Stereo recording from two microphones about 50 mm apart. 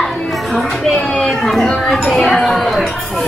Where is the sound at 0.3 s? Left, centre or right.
Centre.